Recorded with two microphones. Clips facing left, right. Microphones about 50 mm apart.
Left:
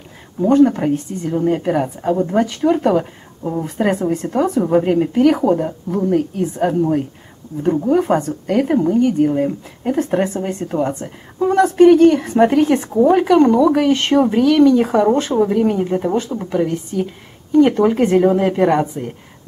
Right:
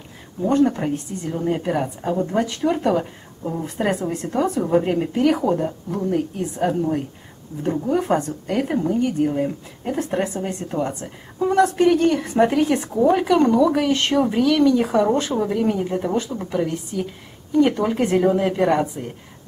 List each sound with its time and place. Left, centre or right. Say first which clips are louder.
0.5 s speech: left 6 dB; centre